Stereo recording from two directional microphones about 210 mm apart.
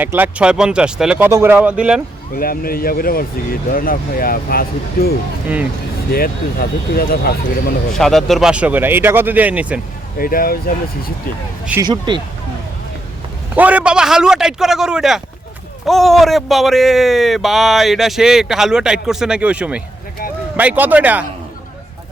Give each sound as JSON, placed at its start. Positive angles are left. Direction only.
{"t": 0.0, "sound": "speech", "side_deg": -10}
{"t": 2.3, "sound": "speech", "side_deg": 45}
{"t": 7.9, "sound": "speech", "side_deg": 0}
{"t": 10.2, "sound": "speech", "side_deg": 45}
{"t": 11.8, "sound": "speech", "side_deg": -20}
{"t": 13.6, "sound": "speech", "side_deg": -5}